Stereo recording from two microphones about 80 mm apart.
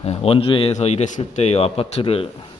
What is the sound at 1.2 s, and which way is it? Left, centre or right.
Speech, left.